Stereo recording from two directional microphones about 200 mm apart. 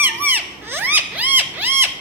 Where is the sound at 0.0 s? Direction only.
10° right (ahead or behind).